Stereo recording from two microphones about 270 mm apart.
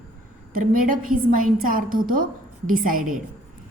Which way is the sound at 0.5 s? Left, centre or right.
Right.